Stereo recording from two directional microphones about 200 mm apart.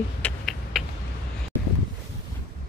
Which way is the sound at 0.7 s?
Centre (ahead or behind).